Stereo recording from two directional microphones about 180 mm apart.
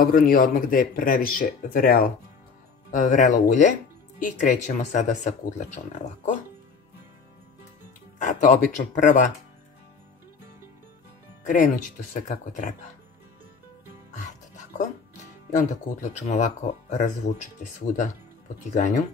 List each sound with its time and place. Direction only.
0.0 s speech: 55° left (ahead or behind)
8.2 s speech: 45° left (ahead or behind)
11.4 s speech: 50° left (ahead or behind)
14.1 s music: 45° left (ahead or behind)
15.5 s speech: 40° left (ahead or behind)